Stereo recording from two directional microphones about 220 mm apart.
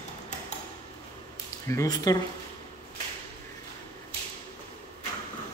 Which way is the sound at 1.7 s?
15° left (ahead or behind).